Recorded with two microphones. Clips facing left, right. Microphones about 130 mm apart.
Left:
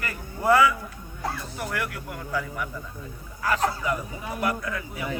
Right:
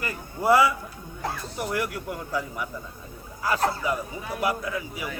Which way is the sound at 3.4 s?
15° right (ahead or behind).